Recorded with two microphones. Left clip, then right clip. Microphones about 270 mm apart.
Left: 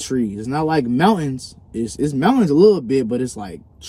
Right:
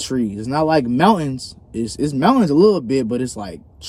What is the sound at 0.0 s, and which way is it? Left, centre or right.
Speech, centre.